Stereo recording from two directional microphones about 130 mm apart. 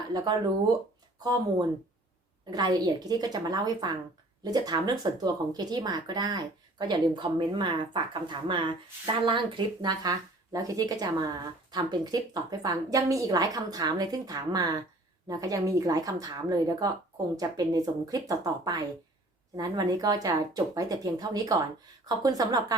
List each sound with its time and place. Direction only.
1.2 s speech: 30° right (ahead or behind)